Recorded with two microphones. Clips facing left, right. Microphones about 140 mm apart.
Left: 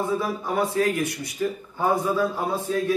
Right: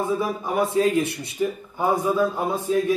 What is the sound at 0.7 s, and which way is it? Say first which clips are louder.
A man's voice: right 3 dB; 25° right (ahead or behind).